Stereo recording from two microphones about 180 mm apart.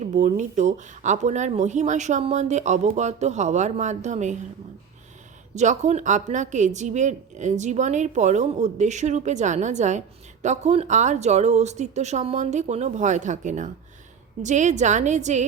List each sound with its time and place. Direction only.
0.1 s a woman's voice: 40° right (ahead or behind)
5.5 s a woman's voice: 40° right (ahead or behind)